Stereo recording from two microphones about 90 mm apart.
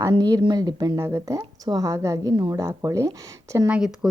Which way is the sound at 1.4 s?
45° right (ahead or behind).